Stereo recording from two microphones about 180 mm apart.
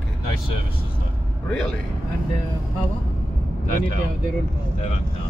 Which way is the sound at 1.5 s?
5° left (ahead or behind).